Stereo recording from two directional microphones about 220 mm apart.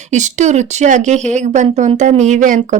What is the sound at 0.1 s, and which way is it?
Speech, 35° right (ahead or behind).